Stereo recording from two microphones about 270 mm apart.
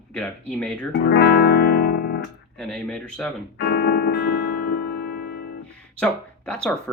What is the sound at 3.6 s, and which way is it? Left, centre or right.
Music, left.